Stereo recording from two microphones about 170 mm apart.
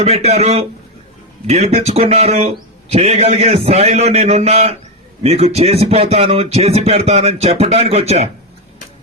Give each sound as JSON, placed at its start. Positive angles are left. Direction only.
{"t": 0.0, "sound": "a man's voice", "side_deg": -40}